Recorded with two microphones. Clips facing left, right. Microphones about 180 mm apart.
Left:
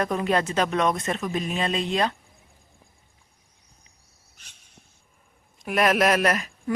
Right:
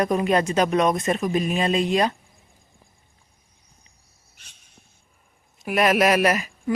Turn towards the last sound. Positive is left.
turn(degrees=-5)  # may be behind; listen again after turning